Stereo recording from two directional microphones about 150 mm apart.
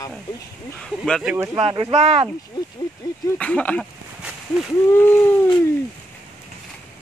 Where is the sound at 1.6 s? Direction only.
40° right (ahead or behind).